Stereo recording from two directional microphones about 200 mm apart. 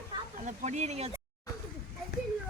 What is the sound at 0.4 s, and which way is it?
Speech, 35° right (ahead or behind).